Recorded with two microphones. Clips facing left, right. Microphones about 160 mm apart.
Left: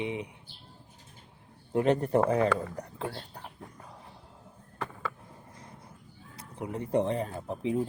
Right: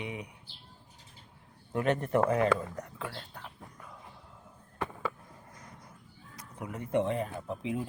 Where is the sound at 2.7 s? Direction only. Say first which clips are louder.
Left 3 dB; 30° left (ahead or behind).